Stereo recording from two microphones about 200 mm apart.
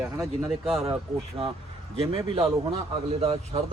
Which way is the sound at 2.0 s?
25° right (ahead or behind).